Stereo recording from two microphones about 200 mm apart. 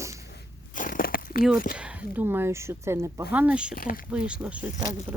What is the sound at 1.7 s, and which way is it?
Speech, 5° right (ahead or behind).